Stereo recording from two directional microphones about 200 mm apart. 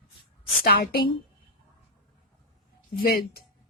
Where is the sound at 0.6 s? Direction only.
50° left (ahead or behind).